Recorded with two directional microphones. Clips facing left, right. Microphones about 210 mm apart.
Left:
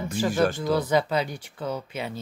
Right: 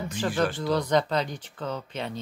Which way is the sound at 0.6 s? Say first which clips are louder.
Left 1 dB; 5° left (ahead or behind).